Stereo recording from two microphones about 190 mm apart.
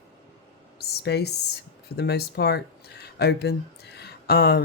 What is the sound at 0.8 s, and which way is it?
A woman's voice, 60° left (ahead or behind).